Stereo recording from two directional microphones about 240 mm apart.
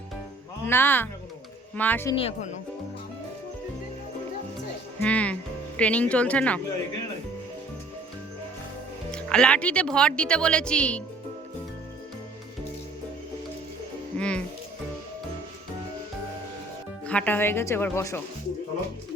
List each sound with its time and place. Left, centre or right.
0.6 s speech: centre
2.1 s speech: left
4.9 s speech: centre
9.1 s a woman's voice: centre
14.2 s speech: centre
17.1 s speech: centre